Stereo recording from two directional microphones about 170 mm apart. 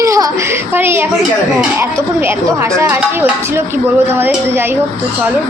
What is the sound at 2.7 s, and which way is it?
A woman's voice, 15° right (ahead or behind).